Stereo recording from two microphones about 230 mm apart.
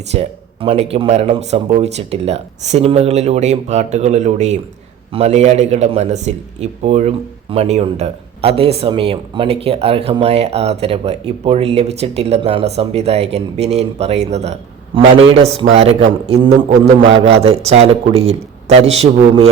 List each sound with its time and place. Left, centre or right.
0.1 s speech: right